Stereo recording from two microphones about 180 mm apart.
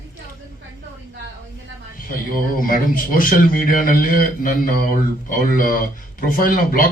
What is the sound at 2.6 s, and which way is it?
Speech, 50° left (ahead or behind).